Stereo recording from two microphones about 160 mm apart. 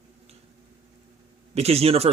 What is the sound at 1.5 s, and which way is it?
Speech, 40° right (ahead or behind).